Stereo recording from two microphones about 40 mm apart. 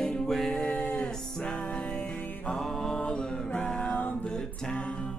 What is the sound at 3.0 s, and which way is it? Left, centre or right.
Music, left.